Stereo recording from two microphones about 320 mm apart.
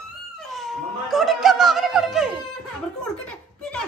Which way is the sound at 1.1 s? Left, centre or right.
Centre.